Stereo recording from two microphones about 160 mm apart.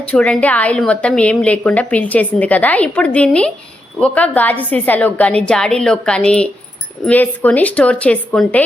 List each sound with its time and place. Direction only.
0.0 s a woman's voice: 5° left (ahead or behind)